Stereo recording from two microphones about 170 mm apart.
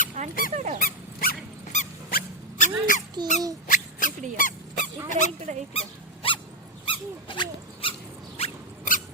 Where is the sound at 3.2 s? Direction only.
25° right (ahead or behind).